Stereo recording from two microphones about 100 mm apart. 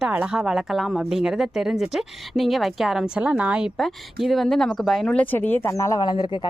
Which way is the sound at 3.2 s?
15° right (ahead or behind).